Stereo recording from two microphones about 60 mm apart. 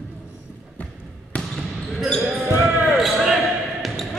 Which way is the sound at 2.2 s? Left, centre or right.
Centre.